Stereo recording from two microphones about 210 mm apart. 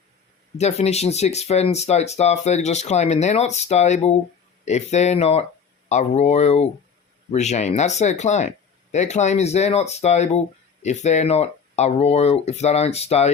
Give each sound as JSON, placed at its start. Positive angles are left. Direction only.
{"t": 0.6, "sound": "speech", "side_deg": 30}